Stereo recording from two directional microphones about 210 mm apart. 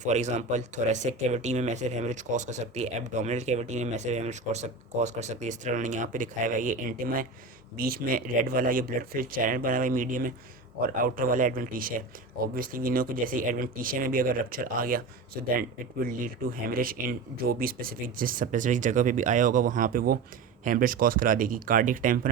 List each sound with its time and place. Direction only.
0.0 s speech: 35° right (ahead or behind)
16.0 s speech: 45° right (ahead or behind)